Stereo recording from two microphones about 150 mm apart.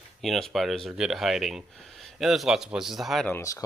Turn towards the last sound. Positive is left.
turn(degrees=15)  # may be behind; listen again after turning